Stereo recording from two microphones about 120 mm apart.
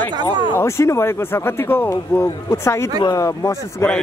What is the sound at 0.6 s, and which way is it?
Speech, 20° left (ahead or behind).